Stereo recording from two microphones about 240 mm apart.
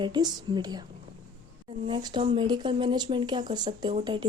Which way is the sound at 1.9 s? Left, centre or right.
Centre.